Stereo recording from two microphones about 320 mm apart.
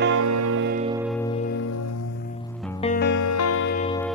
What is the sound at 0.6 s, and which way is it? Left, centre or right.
Music, right.